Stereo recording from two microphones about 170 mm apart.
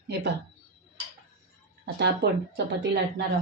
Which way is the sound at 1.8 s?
80° right.